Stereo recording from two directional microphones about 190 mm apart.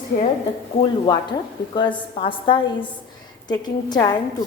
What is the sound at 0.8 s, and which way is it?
Speech, 25° left (ahead or behind).